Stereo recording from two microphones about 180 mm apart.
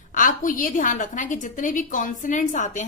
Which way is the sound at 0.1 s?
45° left (ahead or behind).